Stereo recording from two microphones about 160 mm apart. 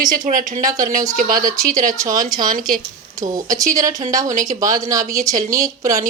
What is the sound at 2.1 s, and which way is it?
Speech, 55° right (ahead or behind).